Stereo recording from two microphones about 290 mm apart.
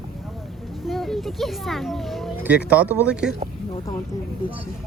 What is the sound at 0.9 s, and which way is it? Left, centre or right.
A child's voice, centre.